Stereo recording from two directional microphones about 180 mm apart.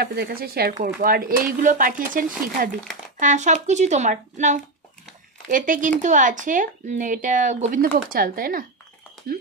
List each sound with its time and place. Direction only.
0.0 s speech: 60° right (ahead or behind)